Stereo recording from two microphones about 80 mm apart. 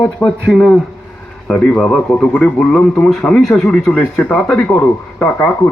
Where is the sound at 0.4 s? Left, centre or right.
Centre.